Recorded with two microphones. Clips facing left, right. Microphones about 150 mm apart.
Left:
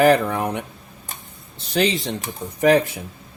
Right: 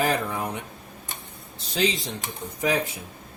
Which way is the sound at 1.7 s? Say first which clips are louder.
Left 5 dB; 65° left (ahead or behind).